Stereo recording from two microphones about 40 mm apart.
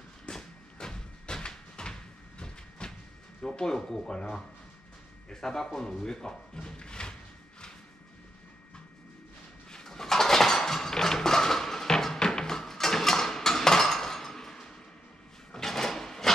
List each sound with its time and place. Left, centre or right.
0.3 s a sound: centre
3.5 s speech: centre
9.7 s dishes: centre
15.5 s printer: centre